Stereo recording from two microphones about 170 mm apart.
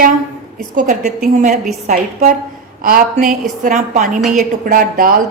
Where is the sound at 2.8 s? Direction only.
60° right (ahead or behind).